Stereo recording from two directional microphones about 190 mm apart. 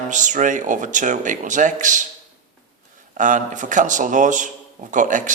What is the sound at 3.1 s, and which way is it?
Speech, 40° right (ahead or behind).